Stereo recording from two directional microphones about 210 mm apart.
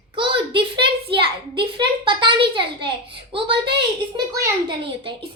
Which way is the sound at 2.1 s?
25° right (ahead or behind).